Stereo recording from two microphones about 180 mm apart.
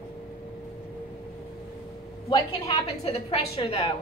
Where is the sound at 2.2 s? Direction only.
30° left (ahead or behind).